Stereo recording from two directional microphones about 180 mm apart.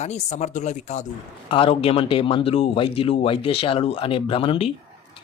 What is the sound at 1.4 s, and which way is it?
Speech, 30° left (ahead or behind).